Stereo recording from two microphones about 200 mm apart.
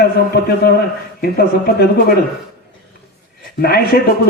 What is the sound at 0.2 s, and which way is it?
Speech, 50° left (ahead or behind).